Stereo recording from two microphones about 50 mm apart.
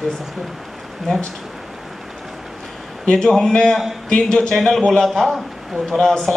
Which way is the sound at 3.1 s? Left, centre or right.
Centre.